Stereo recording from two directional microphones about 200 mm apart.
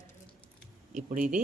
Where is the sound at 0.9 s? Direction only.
40° right (ahead or behind).